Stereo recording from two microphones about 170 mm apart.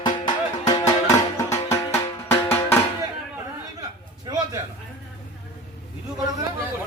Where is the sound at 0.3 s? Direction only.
20° left (ahead or behind).